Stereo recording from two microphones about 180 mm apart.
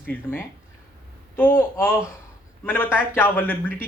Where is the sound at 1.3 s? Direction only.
15° left (ahead or behind).